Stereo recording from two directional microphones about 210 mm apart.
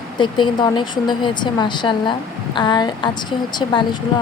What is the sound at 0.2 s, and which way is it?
Speech, 20° left (ahead or behind).